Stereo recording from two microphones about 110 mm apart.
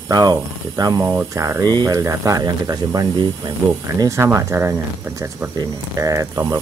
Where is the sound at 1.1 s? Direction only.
25° right (ahead or behind).